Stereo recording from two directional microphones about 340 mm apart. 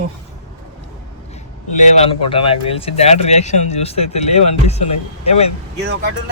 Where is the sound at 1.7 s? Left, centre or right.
Centre.